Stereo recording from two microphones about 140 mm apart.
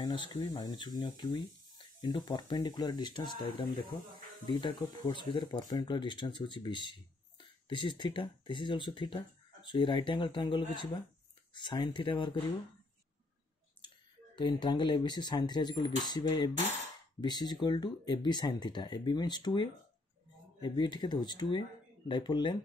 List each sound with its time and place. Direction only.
0.0 s speech: 30° left (ahead or behind)
4.5 s speech: 35° left (ahead or behind)
13.7 s speech: 35° left (ahead or behind)